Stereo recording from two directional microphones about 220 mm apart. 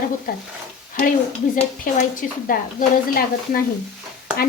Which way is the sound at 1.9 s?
40° left (ahead or behind).